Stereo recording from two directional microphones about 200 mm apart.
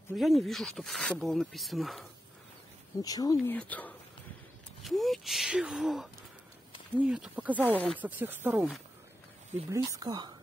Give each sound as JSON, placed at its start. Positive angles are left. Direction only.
{"t": 0.1, "sound": "speech", "side_deg": 0}
{"t": 3.0, "sound": "speech", "side_deg": 20}
{"t": 7.7, "sound": "speech", "side_deg": 5}
{"t": 8.0, "sound": "speech", "side_deg": -10}